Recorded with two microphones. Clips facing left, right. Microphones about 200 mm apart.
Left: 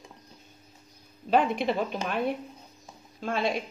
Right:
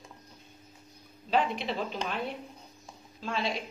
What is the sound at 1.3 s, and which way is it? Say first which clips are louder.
A woman's voice: left 5 dB; 50° left (ahead or behind).